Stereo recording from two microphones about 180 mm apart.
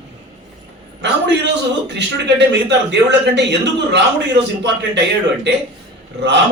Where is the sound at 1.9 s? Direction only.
75° right (ahead or behind).